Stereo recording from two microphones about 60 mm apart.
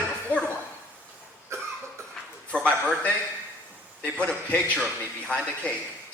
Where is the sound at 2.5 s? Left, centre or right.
Centre.